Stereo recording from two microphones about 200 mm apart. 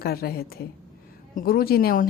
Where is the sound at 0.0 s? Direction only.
50° left (ahead or behind).